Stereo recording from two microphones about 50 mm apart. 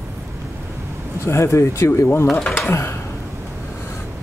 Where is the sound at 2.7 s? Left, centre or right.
Left.